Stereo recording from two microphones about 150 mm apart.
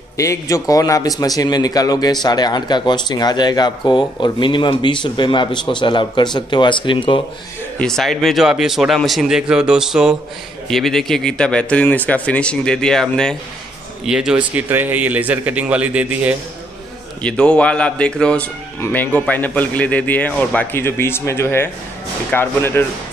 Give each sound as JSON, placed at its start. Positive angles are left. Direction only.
{"t": 0.2, "sound": "a man's voice", "side_deg": 20}
{"t": 7.8, "sound": "a man's voice", "side_deg": 5}
{"t": 17.2, "sound": "a man's voice", "side_deg": 5}